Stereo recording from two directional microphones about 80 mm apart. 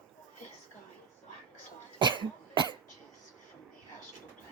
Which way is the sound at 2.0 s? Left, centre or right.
Right.